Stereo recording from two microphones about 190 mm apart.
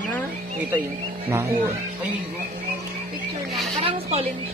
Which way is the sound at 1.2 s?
10° right (ahead or behind).